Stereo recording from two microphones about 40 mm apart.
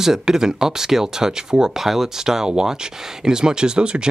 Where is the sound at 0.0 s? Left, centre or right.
Centre.